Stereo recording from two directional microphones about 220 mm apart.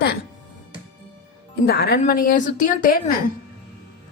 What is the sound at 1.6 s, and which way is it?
A woman's voice, 45° left (ahead or behind).